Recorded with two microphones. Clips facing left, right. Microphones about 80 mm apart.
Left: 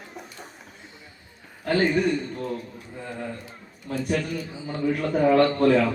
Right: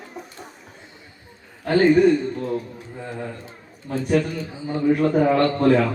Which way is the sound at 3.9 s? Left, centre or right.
Right.